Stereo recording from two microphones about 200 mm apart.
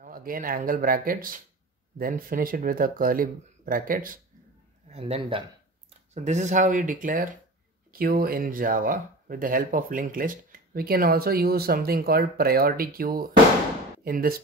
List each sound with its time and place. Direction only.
0.0 s speech: 45° right (ahead or behind)
4.8 s a man's voice: 30° right (ahead or behind); by 14.4 s 45° right (ahead or behind)